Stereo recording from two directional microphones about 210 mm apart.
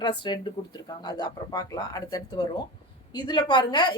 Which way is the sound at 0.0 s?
20° left (ahead or behind).